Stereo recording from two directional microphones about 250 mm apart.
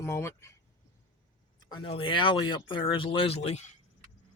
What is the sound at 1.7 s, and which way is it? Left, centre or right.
Speech, left.